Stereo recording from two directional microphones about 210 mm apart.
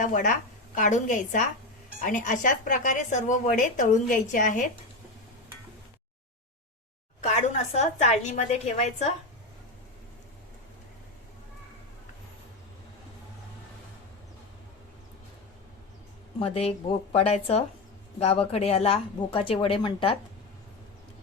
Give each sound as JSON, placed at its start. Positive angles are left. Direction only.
{"t": 0.0, "sound": "speech", "side_deg": 35}
{"t": 7.2, "sound": "speech", "side_deg": 35}
{"t": 16.4, "sound": "speech", "side_deg": 30}